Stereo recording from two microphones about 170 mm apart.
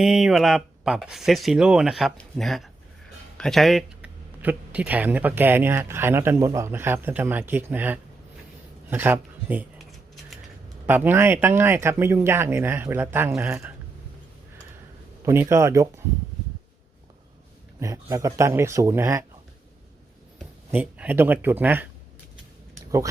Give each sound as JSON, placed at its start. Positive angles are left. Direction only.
{"t": 0.0, "sound": "speech", "side_deg": 0}
{"t": 10.8, "sound": "speech", "side_deg": -10}
{"t": 15.2, "sound": "speech", "side_deg": -15}
{"t": 17.7, "sound": "speech", "side_deg": -15}
{"t": 20.7, "sound": "speech", "side_deg": -10}